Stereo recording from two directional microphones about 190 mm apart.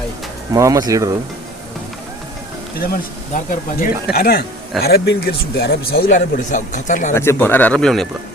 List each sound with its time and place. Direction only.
0.5 s speech: 20° right (ahead or behind)
2.8 s speech: 50° left (ahead or behind)
7.1 s speech: 15° left (ahead or behind)